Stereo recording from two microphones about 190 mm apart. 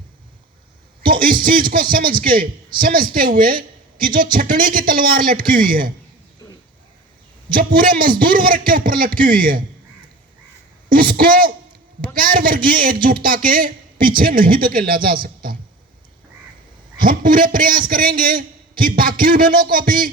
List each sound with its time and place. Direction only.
1.2 s a man's voice: 50° right (ahead or behind)
7.5 s a man's voice: 50° right (ahead or behind)
11.2 s a man's voice: 50° right (ahead or behind)
17.0 s a man's voice: 45° right (ahead or behind)